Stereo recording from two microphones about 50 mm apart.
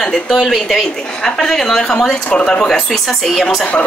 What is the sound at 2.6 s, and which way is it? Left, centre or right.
Speech, centre.